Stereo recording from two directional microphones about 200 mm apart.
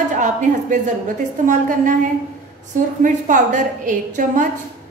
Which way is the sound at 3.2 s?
40° right (ahead or behind).